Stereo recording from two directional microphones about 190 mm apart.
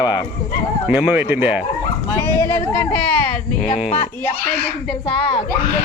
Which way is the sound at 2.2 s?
15° left (ahead or behind).